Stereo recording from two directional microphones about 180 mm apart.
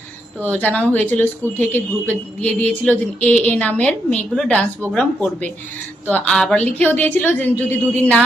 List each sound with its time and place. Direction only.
0.6 s speech: 10° left (ahead or behind)